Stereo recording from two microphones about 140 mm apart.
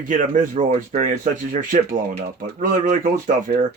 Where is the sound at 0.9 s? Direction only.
50° right (ahead or behind).